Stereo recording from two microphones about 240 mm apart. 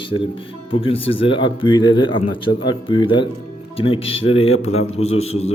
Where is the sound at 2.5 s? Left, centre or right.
Left.